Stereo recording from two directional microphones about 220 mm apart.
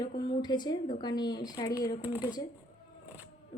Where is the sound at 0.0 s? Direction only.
20° left (ahead or behind).